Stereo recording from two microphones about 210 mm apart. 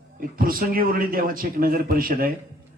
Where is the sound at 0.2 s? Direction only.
45° right (ahead or behind).